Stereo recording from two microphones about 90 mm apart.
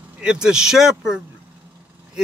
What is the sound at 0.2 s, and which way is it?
Speech, 10° right (ahead or behind).